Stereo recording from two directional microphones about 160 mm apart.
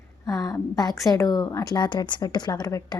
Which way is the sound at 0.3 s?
20° left (ahead or behind).